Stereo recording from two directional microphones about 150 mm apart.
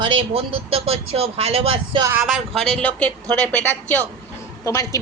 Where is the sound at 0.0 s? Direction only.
35° right (ahead or behind).